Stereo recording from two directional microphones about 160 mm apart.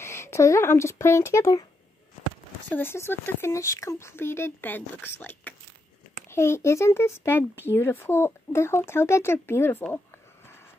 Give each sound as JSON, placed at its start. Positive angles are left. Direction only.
{"t": 0.0, "sound": "speech", "side_deg": 15}
{"t": 2.7, "sound": "speech", "side_deg": 15}